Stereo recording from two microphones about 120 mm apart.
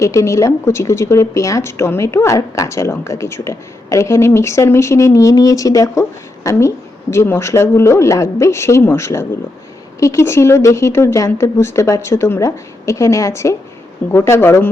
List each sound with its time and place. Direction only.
0.0 s speech: 25° left (ahead or behind)